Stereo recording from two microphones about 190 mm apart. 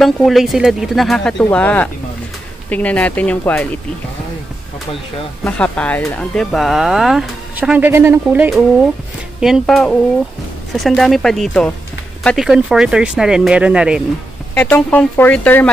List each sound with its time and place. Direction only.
0.0 s speech: centre (ahead or behind)
5.4 s speech: 5° left (ahead or behind)
14.5 s speech: 5° left (ahead or behind)